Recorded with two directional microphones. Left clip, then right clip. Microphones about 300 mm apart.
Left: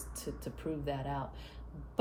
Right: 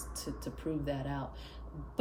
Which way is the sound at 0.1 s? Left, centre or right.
Centre.